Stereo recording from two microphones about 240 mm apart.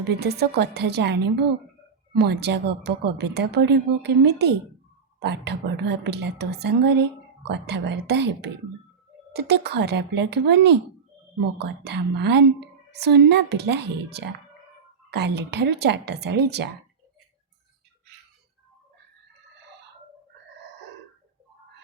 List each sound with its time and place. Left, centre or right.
0.2 s a woman's voice: right